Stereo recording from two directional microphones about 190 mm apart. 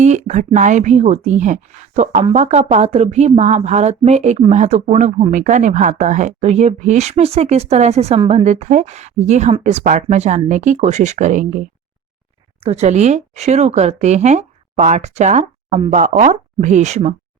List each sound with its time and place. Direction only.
0.0 s a woman's voice: 40° right (ahead or behind)